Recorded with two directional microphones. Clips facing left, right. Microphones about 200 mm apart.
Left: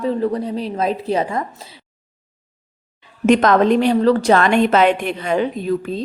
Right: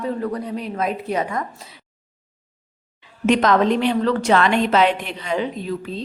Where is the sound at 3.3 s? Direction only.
50° left (ahead or behind).